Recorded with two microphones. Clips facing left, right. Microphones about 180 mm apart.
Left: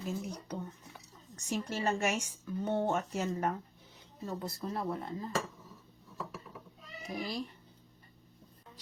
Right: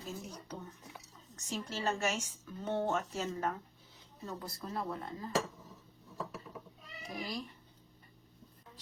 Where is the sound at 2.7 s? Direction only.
15° left (ahead or behind).